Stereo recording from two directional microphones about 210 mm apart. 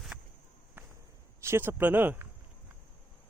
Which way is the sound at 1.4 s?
10° right (ahead or behind).